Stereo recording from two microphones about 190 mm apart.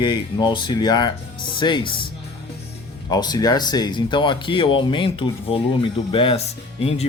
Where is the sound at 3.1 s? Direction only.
20° left (ahead or behind).